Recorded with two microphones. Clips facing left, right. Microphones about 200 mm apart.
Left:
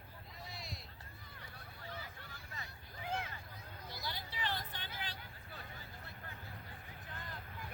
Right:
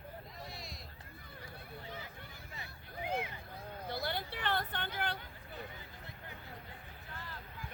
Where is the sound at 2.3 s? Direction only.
15° right (ahead or behind).